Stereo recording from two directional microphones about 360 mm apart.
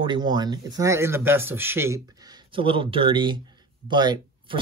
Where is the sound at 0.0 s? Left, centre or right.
Centre.